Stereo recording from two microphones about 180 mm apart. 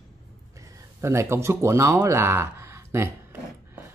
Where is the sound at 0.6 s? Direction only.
15° right (ahead or behind).